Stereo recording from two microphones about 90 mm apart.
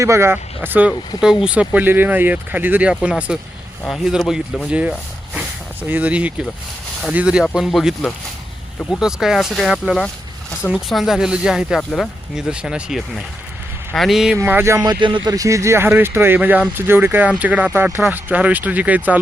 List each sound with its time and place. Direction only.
0.0 s speech: 30° right (ahead or behind)
1.2 s speech: 5° right (ahead or behind)
3.8 s speech: centre (ahead or behind)
4.7 s a sound: 10° right (ahead or behind)
5.9 s speech: 15° right (ahead or behind)
11.8 s speech: 10° left (ahead or behind)
12.4 s speech: 10° right (ahead or behind)
14.4 s speech: 25° right (ahead or behind)
14.8 s speech: 65° right (ahead or behind)
15.2 s speech: 40° right (ahead or behind); by 19.2 s 15° right (ahead or behind)